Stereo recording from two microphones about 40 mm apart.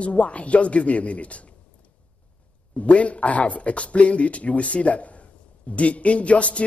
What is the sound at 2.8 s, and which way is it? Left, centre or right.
A woman's voice, left.